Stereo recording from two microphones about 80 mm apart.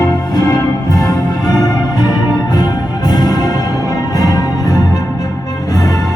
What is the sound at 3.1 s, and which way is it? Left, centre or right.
Music, left.